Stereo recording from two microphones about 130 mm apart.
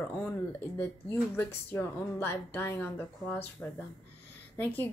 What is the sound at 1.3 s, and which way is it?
A woman's voice, 15° left (ahead or behind).